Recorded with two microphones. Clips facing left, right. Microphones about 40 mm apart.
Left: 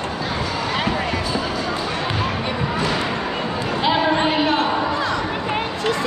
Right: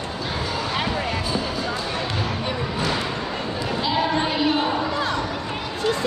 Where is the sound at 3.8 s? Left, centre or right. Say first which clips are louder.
Left 4 dB; left.